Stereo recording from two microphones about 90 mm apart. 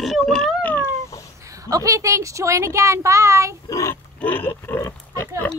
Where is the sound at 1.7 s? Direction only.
40° right (ahead or behind).